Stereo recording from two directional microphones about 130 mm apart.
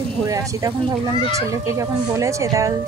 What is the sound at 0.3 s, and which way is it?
Speech, 25° right (ahead or behind).